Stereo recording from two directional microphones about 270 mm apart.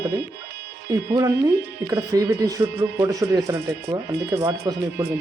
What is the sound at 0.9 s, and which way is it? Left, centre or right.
A woman's voice, centre.